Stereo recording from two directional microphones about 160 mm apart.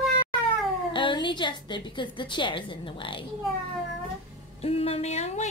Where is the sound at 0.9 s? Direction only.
30° left (ahead or behind).